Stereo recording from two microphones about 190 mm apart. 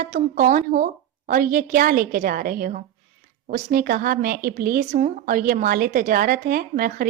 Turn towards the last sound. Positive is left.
turn(degrees=-50)  # may be behind; listen again after turning